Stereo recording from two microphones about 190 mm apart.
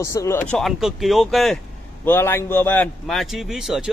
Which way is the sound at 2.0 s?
10° left (ahead or behind).